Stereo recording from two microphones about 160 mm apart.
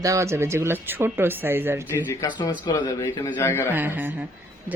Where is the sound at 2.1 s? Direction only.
25° left (ahead or behind).